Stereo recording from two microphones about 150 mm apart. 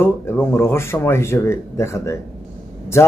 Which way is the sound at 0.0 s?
15° left (ahead or behind).